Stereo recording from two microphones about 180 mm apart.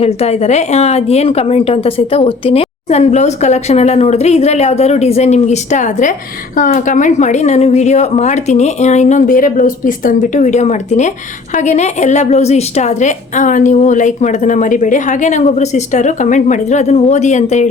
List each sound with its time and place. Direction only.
0.0 s a woman's voice: 35° left (ahead or behind)